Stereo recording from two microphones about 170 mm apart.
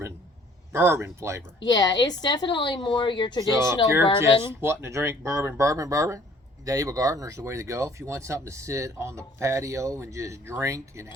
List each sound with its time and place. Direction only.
0.7 s speech: 15° right (ahead or behind)
1.6 s a woman's voice: 25° left (ahead or behind)
3.5 s speech: 15° right (ahead or behind)
4.0 s a woman's voice: 30° left (ahead or behind)
4.6 s speech: 15° right (ahead or behind)